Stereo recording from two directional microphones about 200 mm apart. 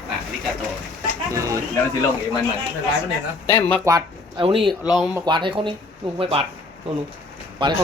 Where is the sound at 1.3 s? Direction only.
15° right (ahead or behind).